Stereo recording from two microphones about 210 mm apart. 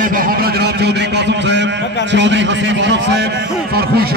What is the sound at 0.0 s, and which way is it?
A man's voice, 40° right (ahead or behind).